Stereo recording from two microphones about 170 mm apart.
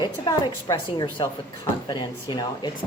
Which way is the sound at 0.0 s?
25° left (ahead or behind).